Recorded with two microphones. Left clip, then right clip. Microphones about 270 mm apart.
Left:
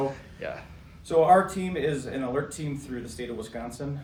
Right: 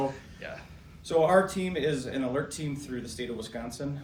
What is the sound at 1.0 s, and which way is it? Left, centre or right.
Speech, centre.